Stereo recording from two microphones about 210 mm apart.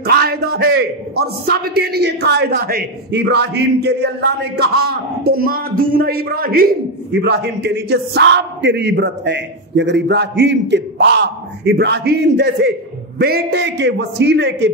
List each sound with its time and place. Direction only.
0.0 s a man's voice: 50° right (ahead or behind)